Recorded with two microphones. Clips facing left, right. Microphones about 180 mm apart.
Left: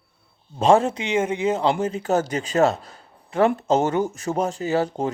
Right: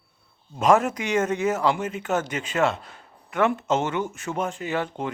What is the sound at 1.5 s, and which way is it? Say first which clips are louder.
A man's voice: left 3 dB; 30° left (ahead or behind).